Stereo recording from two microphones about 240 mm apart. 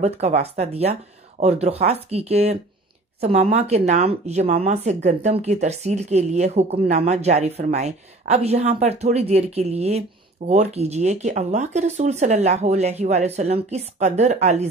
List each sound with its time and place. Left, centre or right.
0.0 s speech: right